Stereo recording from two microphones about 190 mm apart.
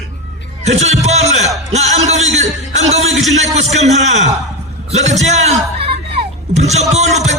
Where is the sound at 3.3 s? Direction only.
35° right (ahead or behind).